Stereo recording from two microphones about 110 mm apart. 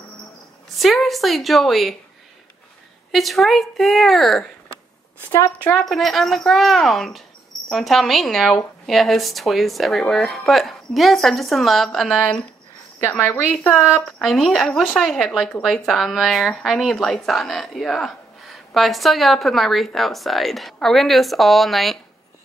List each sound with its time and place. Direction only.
0.7 s speech: centre (ahead or behind)
3.1 s speech: centre (ahead or behind)
5.3 s a woman's voice: 20° left (ahead or behind)
5.7 s speech: 5° left (ahead or behind)
13.0 s a woman's voice: 15° left (ahead or behind)
14.1 s speech: centre (ahead or behind)